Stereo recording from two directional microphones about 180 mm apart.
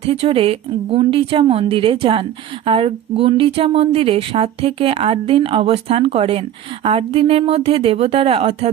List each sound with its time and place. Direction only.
0.0 s speech: 35° right (ahead or behind)